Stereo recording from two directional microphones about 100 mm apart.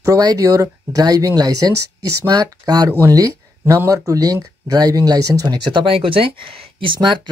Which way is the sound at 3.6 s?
20° right (ahead or behind).